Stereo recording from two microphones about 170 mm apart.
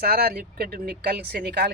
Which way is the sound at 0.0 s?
65° right (ahead or behind).